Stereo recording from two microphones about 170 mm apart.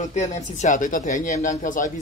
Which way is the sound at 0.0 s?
45° left (ahead or behind).